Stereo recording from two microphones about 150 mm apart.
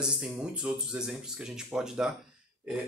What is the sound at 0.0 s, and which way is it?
Speech, 5° right (ahead or behind).